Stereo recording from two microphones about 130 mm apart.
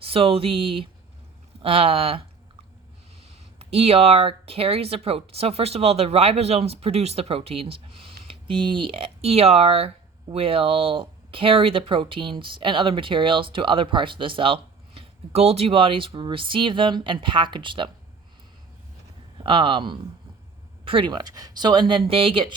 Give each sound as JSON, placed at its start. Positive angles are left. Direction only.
{"t": 0.0, "sound": "speech", "side_deg": -45}
{"t": 3.6, "sound": "speech", "side_deg": -50}
{"t": 19.4, "sound": "speech", "side_deg": -40}